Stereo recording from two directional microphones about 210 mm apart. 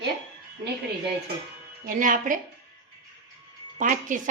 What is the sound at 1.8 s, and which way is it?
Speech, 40° right (ahead or behind).